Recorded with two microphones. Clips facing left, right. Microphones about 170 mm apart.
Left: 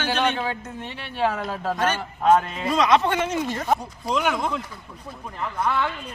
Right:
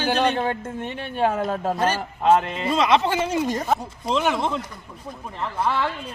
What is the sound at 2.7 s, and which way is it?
Speech, 25° right (ahead or behind).